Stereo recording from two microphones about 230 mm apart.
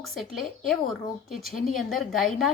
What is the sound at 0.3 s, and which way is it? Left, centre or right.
A woman's voice, centre.